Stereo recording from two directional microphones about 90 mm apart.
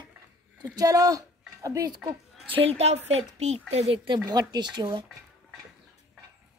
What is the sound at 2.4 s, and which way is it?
Speech, 80° right.